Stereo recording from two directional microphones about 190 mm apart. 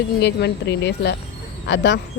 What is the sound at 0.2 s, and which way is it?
Speech, 60° left (ahead or behind).